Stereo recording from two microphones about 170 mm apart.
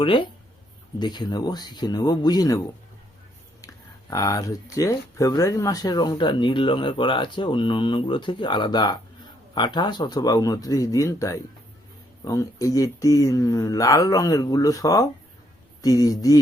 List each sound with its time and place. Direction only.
0.0 s speech: 30° left (ahead or behind)
3.6 s speech: 20° left (ahead or behind)